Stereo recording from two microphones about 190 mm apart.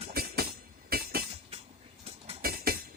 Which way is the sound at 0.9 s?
55° right (ahead or behind).